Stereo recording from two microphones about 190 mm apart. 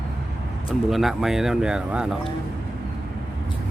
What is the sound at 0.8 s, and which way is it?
Speech, centre (ahead or behind).